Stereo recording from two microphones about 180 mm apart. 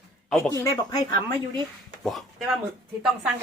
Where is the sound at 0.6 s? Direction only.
20° left (ahead or behind).